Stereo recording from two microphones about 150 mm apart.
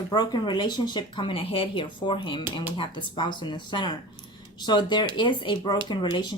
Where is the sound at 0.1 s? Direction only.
30° left (ahead or behind).